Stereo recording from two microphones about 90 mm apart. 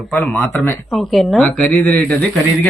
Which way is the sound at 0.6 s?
25° left (ahead or behind).